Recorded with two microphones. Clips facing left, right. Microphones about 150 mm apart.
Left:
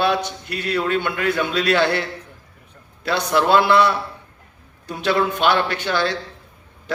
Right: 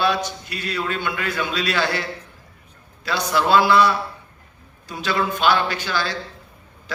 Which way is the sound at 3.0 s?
60° left (ahead or behind).